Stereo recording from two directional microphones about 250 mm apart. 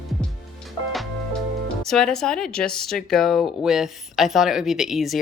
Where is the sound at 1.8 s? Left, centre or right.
Centre.